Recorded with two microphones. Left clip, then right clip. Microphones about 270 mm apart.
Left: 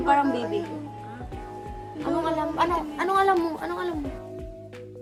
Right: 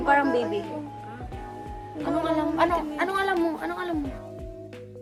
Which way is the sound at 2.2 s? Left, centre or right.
Centre.